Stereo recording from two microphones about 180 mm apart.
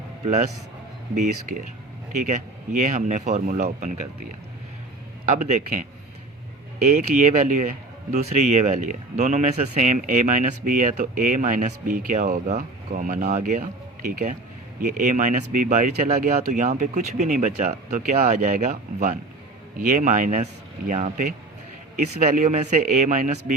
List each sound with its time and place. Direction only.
1.1 s speech: 45° right (ahead or behind)
5.3 s speech: 45° right (ahead or behind)
6.8 s speech: 45° right (ahead or behind)